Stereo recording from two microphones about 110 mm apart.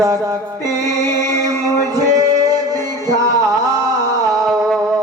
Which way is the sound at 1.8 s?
35° right (ahead or behind).